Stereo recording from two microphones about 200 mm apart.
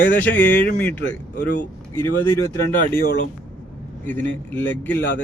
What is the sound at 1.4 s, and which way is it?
Speech, 55° left (ahead or behind).